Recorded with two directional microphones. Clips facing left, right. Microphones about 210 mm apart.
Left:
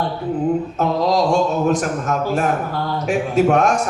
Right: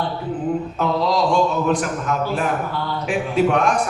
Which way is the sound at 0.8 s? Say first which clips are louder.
Left 1 dB; 45° left (ahead or behind).